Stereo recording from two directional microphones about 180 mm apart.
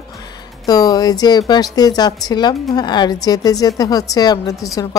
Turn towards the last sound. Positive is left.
turn(degrees=20)  # may be behind; listen again after turning